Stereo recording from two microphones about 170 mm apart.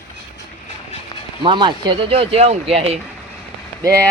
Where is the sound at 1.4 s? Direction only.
30° right (ahead or behind).